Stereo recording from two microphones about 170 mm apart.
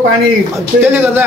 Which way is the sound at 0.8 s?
10° right (ahead or behind).